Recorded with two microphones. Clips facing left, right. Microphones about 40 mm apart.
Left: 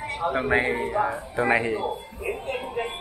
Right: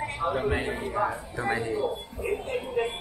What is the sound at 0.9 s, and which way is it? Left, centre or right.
Speech, centre.